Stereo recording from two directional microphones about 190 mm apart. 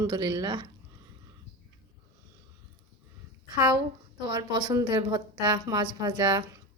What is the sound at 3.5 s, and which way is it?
A woman's voice, 20° right (ahead or behind).